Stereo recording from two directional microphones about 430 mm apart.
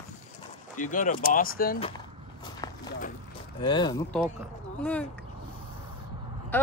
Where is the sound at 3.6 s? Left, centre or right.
Centre.